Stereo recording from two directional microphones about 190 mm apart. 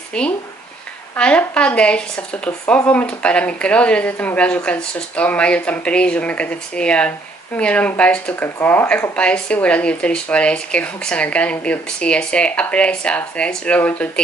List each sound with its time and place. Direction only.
0.1 s speech: 5° left (ahead or behind)